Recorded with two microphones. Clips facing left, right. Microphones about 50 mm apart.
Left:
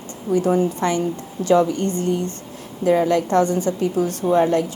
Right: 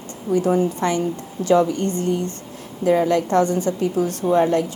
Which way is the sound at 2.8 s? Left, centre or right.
Left.